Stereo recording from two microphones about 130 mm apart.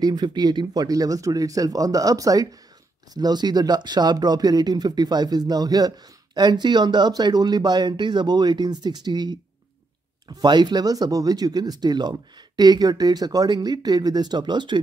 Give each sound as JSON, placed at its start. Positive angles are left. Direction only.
{"t": 0.0, "sound": "speech", "side_deg": -30}